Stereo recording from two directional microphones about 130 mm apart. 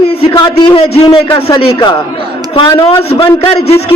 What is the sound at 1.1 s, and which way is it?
Speech, 45° left (ahead or behind).